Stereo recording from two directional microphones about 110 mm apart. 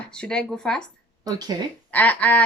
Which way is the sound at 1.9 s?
15° left (ahead or behind).